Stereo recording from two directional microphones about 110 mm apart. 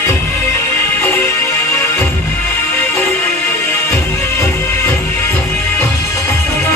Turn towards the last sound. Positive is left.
turn(degrees=25)  # may be behind; listen again after turning